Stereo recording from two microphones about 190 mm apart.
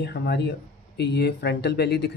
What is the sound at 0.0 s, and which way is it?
Speech, 60° left (ahead or behind).